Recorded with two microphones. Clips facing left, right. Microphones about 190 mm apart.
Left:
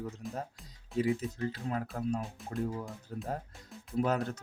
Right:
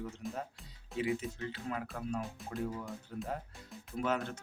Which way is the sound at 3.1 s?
40° left (ahead or behind).